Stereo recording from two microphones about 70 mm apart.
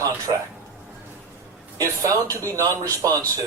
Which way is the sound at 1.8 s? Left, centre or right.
Right.